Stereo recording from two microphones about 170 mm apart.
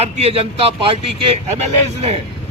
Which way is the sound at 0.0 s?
35° right (ahead or behind).